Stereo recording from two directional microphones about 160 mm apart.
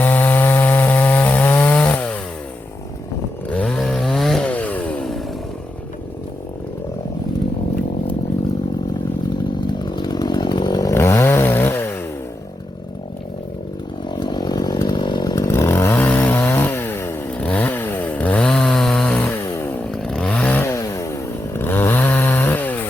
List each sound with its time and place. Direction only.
0.0 s chainsaw: 10° left (ahead or behind)
3.5 s chainsaw: 5° left (ahead or behind)
9.6 s chainsaw: 30° left (ahead or behind)
14.1 s chainsaw: 25° left (ahead or behind); by 22.8 s 10° left (ahead or behind)